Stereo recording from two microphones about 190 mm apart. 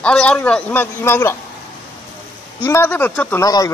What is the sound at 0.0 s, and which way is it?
Speech, 5° left (ahead or behind).